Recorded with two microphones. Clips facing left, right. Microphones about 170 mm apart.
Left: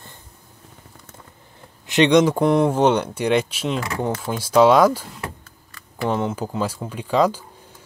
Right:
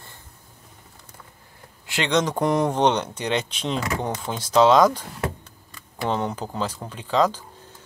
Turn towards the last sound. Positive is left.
turn(degrees=10)  # may be behind; listen again after turning